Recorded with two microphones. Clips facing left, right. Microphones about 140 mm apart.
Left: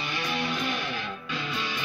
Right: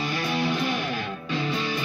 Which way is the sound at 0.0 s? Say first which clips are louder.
Right 5 dB; 35° right (ahead or behind).